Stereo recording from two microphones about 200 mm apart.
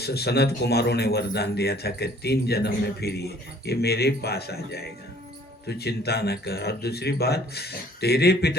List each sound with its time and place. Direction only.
0.0 s a man's voice: 55° left (ahead or behind)